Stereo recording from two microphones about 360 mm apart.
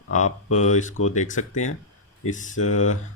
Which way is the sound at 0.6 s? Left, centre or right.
Centre.